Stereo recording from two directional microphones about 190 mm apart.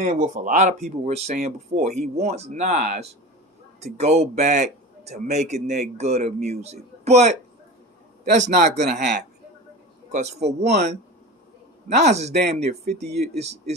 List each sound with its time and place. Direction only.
0.0 s a man's voice: 45° right (ahead or behind)
8.4 s a man's voice: 40° right (ahead or behind)
10.7 s speech: 60° right (ahead or behind)
11.9 s a man's voice: 35° right (ahead or behind)